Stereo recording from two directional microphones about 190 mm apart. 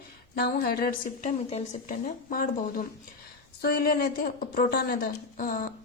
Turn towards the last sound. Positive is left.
turn(degrees=45)  # may be behind; listen again after turning